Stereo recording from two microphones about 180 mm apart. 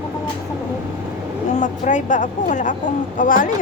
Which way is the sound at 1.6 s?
45° left (ahead or behind).